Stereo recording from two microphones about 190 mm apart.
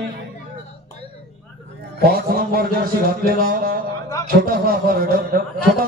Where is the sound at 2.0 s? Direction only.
55° right (ahead or behind).